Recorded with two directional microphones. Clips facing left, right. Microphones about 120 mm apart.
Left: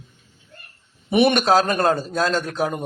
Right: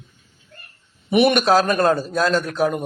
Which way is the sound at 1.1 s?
30° left (ahead or behind).